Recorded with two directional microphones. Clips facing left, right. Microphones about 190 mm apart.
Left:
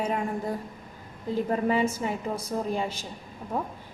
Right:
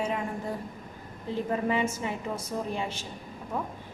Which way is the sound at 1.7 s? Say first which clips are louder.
Left 3 dB; 40° left (ahead or behind).